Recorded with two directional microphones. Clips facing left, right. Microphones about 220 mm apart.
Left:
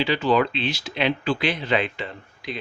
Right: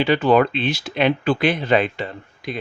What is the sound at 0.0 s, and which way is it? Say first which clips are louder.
Speech: right 5 dB; 55° right (ahead or behind).